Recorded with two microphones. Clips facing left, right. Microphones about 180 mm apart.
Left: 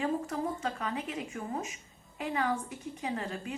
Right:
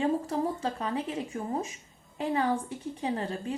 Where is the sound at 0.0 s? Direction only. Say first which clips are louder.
Right 4 dB; 30° right (ahead or behind).